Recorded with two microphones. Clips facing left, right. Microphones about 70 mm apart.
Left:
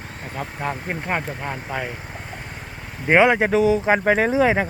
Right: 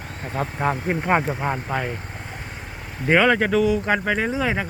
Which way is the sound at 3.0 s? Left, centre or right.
Left.